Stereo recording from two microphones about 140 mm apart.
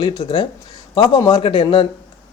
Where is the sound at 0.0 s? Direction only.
35° left (ahead or behind).